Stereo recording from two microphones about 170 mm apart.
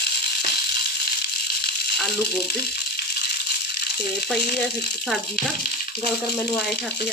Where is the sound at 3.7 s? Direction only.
70° left (ahead or behind).